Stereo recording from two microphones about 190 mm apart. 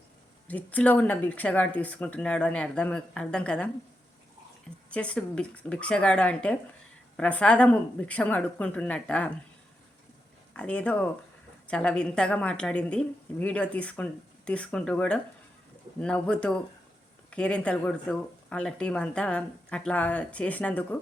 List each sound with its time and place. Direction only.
0.4 s speech: 10° left (ahead or behind)
4.9 s a woman's voice: 5° left (ahead or behind)
10.5 s a woman's voice: 5° left (ahead or behind)